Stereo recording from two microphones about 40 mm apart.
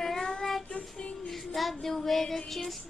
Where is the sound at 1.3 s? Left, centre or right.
Centre.